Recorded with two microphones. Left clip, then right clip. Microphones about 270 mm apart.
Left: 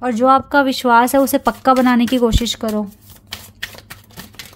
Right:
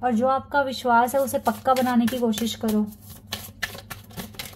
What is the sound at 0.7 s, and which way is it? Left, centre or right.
Speech, left.